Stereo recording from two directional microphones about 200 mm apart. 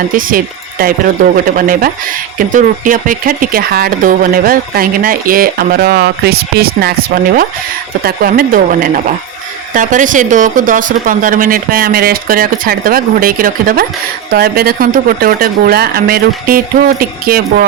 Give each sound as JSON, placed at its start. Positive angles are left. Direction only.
{"t": 0.2, "sound": "speech", "side_deg": -45}
{"t": 8.0, "sound": "speech", "side_deg": -45}